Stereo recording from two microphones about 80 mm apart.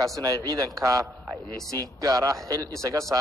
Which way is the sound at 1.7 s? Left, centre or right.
Right.